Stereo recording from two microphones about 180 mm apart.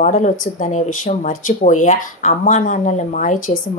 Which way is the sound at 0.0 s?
45° left (ahead or behind).